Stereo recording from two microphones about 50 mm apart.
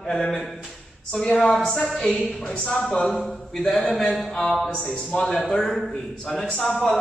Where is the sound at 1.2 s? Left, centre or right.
Left.